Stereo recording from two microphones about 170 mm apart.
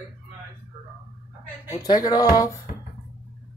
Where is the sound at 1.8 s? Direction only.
25° left (ahead or behind).